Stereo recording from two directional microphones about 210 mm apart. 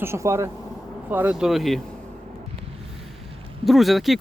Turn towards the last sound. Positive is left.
turn(degrees=0)  # may be behind; listen again after turning